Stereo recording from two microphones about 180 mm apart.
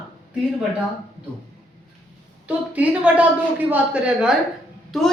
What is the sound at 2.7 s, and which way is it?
A woman's voice, 10° right (ahead or behind).